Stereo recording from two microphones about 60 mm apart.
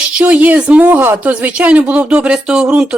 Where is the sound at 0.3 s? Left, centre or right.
Right.